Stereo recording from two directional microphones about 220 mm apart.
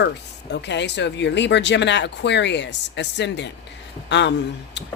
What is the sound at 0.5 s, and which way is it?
Speech, 50° left (ahead or behind).